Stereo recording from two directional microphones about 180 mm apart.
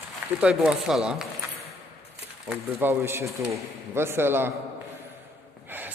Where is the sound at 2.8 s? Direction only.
15° right (ahead or behind).